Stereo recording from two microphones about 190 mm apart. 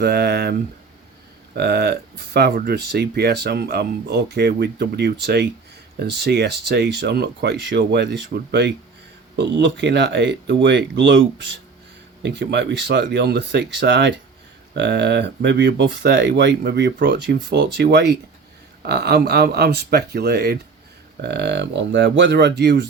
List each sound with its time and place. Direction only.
0.0 s speech: 60° right (ahead or behind)
1.5 s speech: 55° right (ahead or behind)